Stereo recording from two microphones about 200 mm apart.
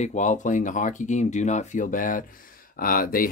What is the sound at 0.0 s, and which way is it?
Speech, 40° left (ahead or behind).